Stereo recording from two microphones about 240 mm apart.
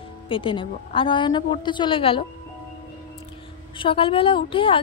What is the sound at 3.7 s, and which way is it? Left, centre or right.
A woman's voice, left.